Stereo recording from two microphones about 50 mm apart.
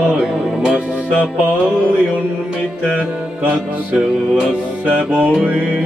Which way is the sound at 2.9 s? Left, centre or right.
Right.